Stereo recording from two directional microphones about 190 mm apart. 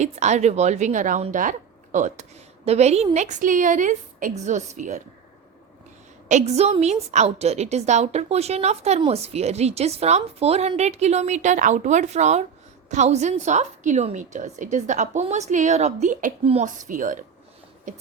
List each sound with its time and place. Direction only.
0.0 s a woman's voice: 40° right (ahead or behind)
6.2 s a woman's voice: 35° right (ahead or behind)